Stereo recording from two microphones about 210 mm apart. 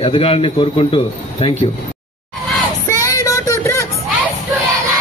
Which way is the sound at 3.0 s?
15° left (ahead or behind).